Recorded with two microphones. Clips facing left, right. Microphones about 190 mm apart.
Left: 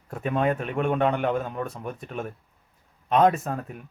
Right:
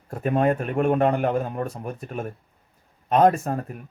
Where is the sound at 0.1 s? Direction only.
45° right (ahead or behind).